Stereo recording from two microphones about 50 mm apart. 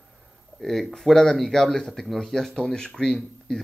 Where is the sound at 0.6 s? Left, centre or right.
Centre.